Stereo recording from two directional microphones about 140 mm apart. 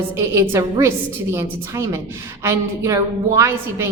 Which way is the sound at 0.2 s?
20° right (ahead or behind).